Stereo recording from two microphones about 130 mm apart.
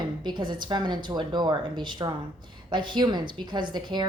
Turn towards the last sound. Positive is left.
turn(degrees=-35)  # may be behind; listen again after turning